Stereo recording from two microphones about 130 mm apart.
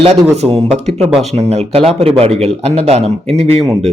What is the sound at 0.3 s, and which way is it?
A man's voice, 55° right (ahead or behind).